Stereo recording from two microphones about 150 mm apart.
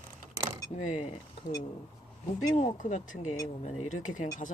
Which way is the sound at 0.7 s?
50° left (ahead or behind).